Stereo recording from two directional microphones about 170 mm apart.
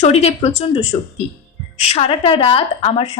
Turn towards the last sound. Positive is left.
turn(degrees=35)  # may be behind; listen again after turning